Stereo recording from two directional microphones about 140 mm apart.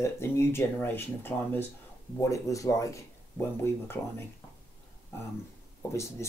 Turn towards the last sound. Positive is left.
turn(degrees=20)  # may be behind; listen again after turning